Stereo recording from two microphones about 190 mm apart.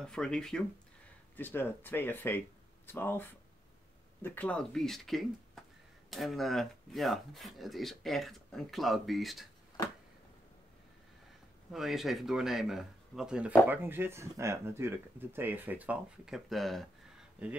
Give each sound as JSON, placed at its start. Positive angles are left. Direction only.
{"t": 0.0, "sound": "speech", "side_deg": 5}
{"t": 11.7, "sound": "speech", "side_deg": 0}